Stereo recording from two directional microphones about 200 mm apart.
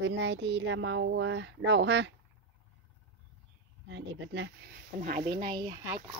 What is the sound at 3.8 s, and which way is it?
Speech, 65° right (ahead or behind).